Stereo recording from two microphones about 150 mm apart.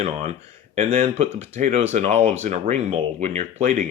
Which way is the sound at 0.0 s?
45° right (ahead or behind).